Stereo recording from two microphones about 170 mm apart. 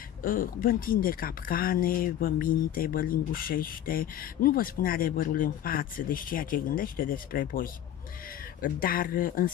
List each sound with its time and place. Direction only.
0.2 s a woman's voice: 55° left (ahead or behind)